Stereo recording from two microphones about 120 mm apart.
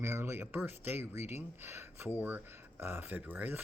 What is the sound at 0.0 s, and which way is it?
A man's voice, 20° right (ahead or behind).